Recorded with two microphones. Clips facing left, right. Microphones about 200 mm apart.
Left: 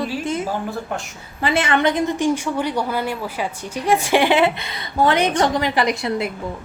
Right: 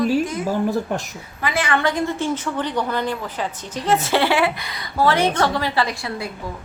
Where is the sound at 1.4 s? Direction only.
25° left (ahead or behind).